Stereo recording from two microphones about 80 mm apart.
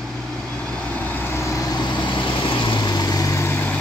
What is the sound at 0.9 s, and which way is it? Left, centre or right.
Vehicle, left.